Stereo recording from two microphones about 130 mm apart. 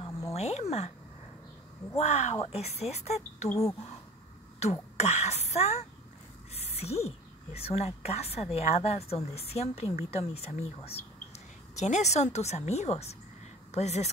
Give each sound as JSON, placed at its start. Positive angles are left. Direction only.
{"t": 0.3, "sound": "speech", "side_deg": 55}
{"t": 2.0, "sound": "speech", "side_deg": 60}
{"t": 3.4, "sound": "speech", "side_deg": 25}
{"t": 4.6, "sound": "speech", "side_deg": 55}
{"t": 6.5, "sound": "a sound", "side_deg": 55}
{"t": 7.5, "sound": "a woman's voice", "side_deg": 50}